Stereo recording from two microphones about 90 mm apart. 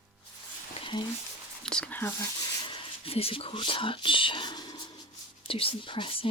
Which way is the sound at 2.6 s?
70° left (ahead or behind).